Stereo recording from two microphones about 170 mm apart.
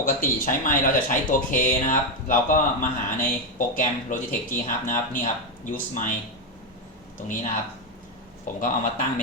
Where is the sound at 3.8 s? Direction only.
50° left (ahead or behind).